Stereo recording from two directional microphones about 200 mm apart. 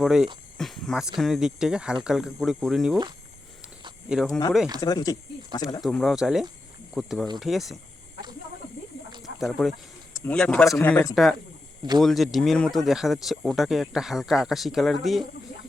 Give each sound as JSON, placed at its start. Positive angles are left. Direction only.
{"t": 0.0, "sound": "speech", "side_deg": 0}
{"t": 4.1, "sound": "speech", "side_deg": 0}
{"t": 4.8, "sound": "speech", "side_deg": 20}
{"t": 5.8, "sound": "speech", "side_deg": 0}
{"t": 9.4, "sound": "speech", "side_deg": 0}